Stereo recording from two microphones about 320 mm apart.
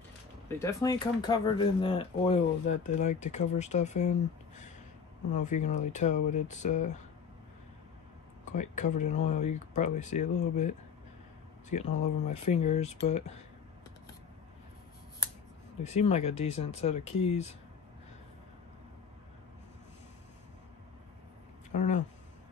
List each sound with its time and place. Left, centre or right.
0.6 s speech: centre
8.5 s speech: left
15.8 s speech: centre
21.7 s speech: left